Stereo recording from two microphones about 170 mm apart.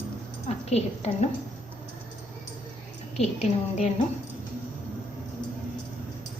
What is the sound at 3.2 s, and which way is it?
Speech, 40° left (ahead or behind).